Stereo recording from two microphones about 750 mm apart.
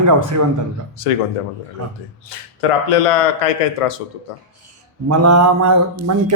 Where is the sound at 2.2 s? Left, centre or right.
Left.